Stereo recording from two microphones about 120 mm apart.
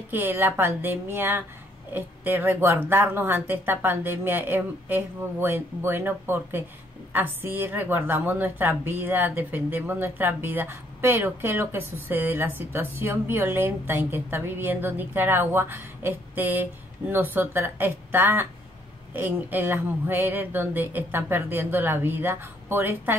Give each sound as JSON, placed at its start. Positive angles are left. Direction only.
{"t": 0.1, "sound": "a woman's voice", "side_deg": -15}